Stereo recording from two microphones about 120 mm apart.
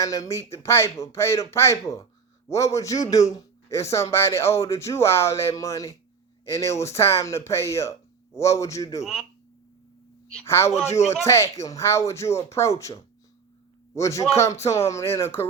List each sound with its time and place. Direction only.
0.0 s a man's voice: 25° left (ahead or behind)
10.4 s a man's voice: 20° left (ahead or behind)